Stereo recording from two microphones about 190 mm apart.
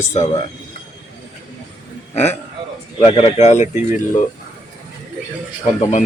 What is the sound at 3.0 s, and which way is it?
Speech, 35° left (ahead or behind).